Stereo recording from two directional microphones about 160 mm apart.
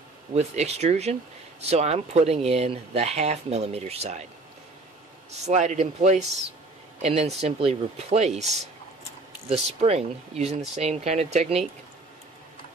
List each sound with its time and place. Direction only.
0.3 s speech: 45° right (ahead or behind)
5.3 s speech: 45° right (ahead or behind)
9.5 s speech: 40° right (ahead or behind)